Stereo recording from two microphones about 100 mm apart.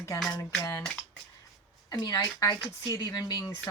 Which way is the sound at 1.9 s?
40° left (ahead or behind).